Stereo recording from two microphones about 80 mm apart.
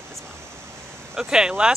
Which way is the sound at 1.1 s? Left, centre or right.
Centre.